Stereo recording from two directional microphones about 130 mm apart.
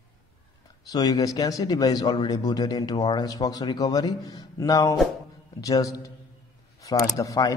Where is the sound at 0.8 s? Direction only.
30° left (ahead or behind).